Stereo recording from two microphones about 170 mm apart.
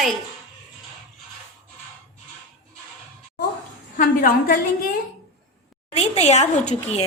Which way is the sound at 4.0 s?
55° left (ahead or behind).